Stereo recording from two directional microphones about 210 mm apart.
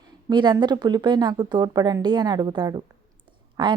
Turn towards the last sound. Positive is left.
turn(degrees=-20)  # may be behind; listen again after turning